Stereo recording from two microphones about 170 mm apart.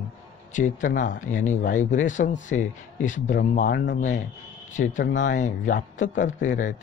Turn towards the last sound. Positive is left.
turn(degrees=50)  # may be behind; listen again after turning